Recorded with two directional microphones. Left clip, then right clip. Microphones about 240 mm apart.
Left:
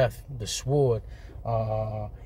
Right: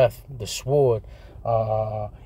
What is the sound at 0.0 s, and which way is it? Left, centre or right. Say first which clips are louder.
Speech: right 6 dB; right.